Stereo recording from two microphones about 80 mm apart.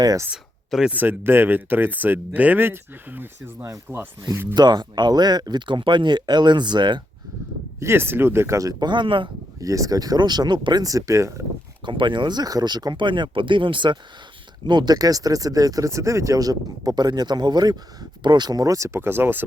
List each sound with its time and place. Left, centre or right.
0.9 s speech: right
4.5 s speech: right
7.8 s speech: right
8.8 s speech: right
9.6 s speech: right
10.8 s speech: right
11.9 s speech: right
14.7 s speech: right
18.9 s speech: right